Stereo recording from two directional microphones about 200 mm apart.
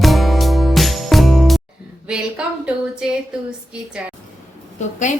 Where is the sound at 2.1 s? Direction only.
5° right (ahead or behind).